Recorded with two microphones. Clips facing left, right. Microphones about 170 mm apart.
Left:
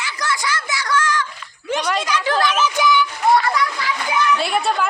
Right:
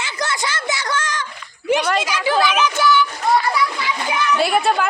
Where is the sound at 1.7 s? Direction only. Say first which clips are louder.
Right 3 dB; 5° right (ahead or behind).